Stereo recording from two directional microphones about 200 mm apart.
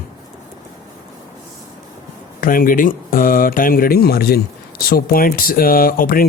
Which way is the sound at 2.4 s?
45° left (ahead or behind).